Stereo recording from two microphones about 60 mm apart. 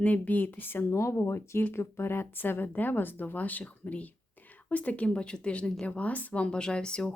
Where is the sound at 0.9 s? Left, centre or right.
Left.